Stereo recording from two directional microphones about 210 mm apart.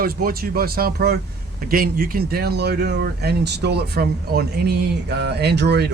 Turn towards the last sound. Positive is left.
turn(degrees=-50)  # may be behind; listen again after turning